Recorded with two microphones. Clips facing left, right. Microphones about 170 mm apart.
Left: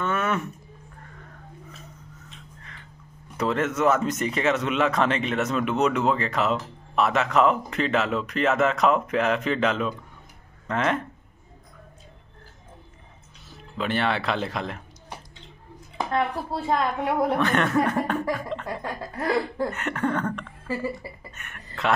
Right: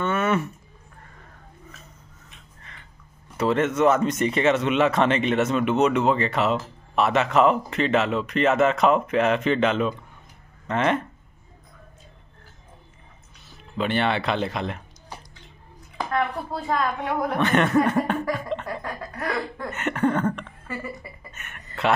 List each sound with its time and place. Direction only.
0.0 s a sound: 5° right (ahead or behind)
3.3 s speech: centre (ahead or behind)
13.7 s speech: centre (ahead or behind)
16.0 s speech: 25° left (ahead or behind)
17.4 s speech: centre (ahead or behind)
18.8 s speech: 25° left (ahead or behind)
19.7 s speech: centre (ahead or behind)
20.6 s speech: 30° left (ahead or behind)
21.3 s speech: 5° right (ahead or behind)